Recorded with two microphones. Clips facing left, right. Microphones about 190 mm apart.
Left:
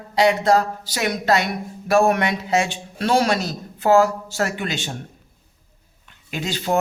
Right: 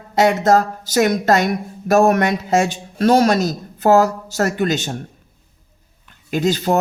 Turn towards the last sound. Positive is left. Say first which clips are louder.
# right 6 dB
turn(degrees=-40)  # may be behind; listen again after turning